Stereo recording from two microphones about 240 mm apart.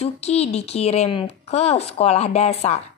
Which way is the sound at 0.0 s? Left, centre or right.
Left.